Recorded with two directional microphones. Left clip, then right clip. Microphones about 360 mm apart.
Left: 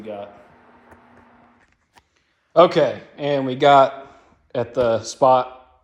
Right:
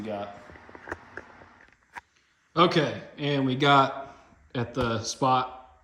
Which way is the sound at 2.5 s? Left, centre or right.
Centre.